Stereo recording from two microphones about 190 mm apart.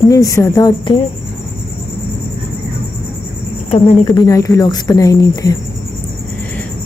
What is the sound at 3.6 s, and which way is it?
Speech, 35° left (ahead or behind).